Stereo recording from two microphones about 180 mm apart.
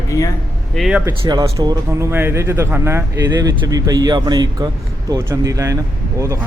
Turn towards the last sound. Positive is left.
turn(degrees=-15)  # may be behind; listen again after turning